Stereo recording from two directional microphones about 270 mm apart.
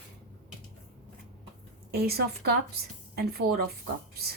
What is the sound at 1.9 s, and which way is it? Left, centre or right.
Speech, right.